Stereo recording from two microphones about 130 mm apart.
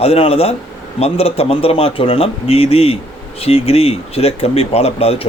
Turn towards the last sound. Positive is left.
turn(degrees=50)  # may be behind; listen again after turning